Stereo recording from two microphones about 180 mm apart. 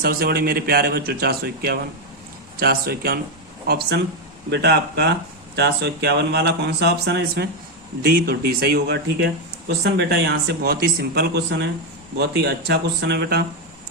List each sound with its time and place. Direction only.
0.0 s speech: 55° right (ahead or behind)
8.0 s speech: 55° right (ahead or behind)